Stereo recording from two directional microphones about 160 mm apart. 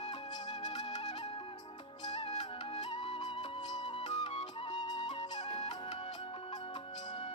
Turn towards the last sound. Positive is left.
turn(degrees=40)  # may be behind; listen again after turning